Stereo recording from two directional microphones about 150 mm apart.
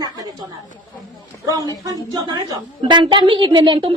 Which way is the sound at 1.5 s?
25° right (ahead or behind).